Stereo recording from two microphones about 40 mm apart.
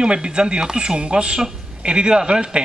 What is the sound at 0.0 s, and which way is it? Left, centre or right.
Speech, right.